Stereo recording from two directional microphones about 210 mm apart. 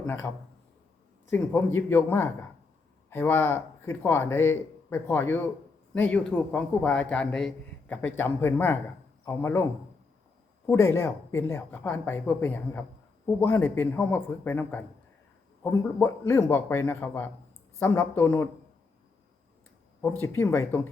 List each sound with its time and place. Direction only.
0.0 s a man's voice: 10° left (ahead or behind)
1.3 s speech: 10° left (ahead or behind)
10.7 s speech: 10° left (ahead or behind)
20.0 s speech: 10° left (ahead or behind)